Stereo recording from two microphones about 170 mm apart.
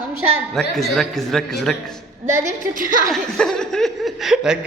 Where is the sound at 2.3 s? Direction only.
45° right (ahead or behind).